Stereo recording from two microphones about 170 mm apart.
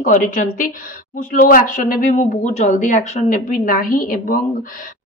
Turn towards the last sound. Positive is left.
turn(degrees=55)  # may be behind; listen again after turning